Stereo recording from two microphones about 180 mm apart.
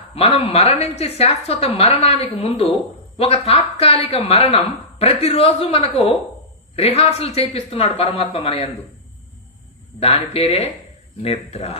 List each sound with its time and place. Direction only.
0.1 s speech: 35° left (ahead or behind)
9.9 s speech: 35° left (ahead or behind)